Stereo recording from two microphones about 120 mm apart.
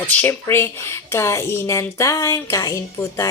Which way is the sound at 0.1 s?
15° left (ahead or behind).